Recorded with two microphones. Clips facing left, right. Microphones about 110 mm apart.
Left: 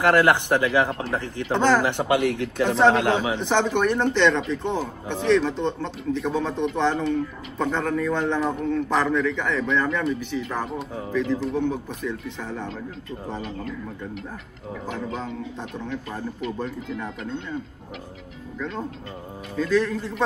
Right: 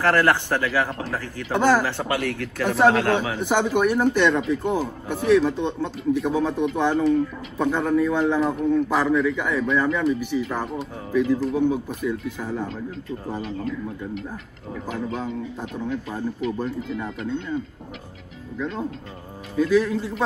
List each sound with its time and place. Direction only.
0.0 s speech: 15° left (ahead or behind)
1.5 s speech: 10° right (ahead or behind)
1.8 s speech: 20° left (ahead or behind)
2.7 s a man's voice: 5° right (ahead or behind)
19.5 s speech: 10° right (ahead or behind)